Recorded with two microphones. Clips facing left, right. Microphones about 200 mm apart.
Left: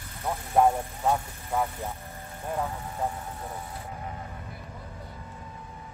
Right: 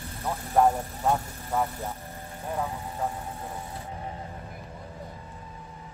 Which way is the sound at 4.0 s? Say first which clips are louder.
Right 1 dB; 30° right (ahead or behind).